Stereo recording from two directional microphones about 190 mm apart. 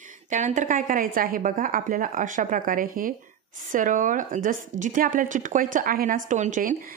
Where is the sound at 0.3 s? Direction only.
40° right (ahead or behind).